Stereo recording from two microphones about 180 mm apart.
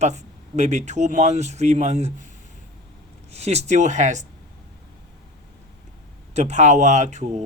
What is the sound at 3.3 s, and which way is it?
Speech, 35° right (ahead or behind).